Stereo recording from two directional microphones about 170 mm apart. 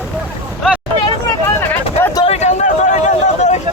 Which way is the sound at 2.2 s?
40° left (ahead or behind).